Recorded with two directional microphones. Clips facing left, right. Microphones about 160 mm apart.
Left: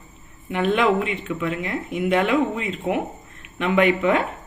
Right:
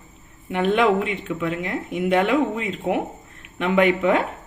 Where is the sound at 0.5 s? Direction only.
45° right (ahead or behind).